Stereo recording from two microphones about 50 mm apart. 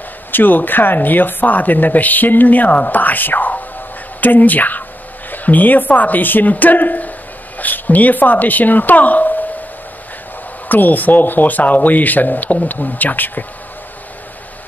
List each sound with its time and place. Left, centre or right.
0.3 s a woman's voice: left
10.7 s a woman's voice: left